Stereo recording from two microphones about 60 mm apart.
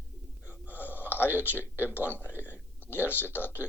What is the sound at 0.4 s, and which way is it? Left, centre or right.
Speech, left.